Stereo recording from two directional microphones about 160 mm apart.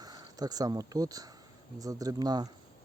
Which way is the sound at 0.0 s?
25° right (ahead or behind).